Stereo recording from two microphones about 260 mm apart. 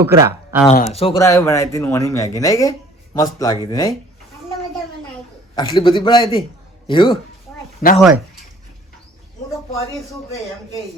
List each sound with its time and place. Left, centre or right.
0.0 s speech: centre
0.9 s speech: centre
5.5 s a man's voice: centre
7.8 s speech: left